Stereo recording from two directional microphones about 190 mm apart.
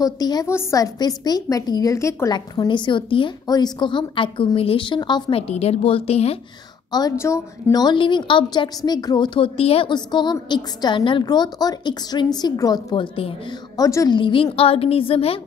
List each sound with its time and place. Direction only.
0.0 s a woman's voice: 20° left (ahead or behind)
6.9 s a woman's voice: 20° left (ahead or behind)